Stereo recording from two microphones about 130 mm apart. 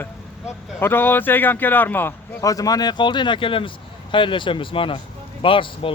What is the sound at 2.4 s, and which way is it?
Speech, 25° left (ahead or behind).